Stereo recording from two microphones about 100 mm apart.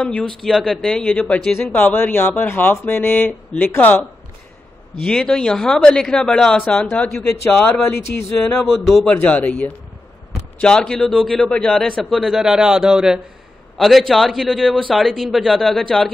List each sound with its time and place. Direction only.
0.4 s a man's voice: centre (ahead or behind)
5.0 s a man's voice: 10° left (ahead or behind)